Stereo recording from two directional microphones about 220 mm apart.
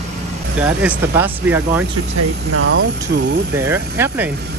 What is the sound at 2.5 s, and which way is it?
Speech, 75° right (ahead or behind).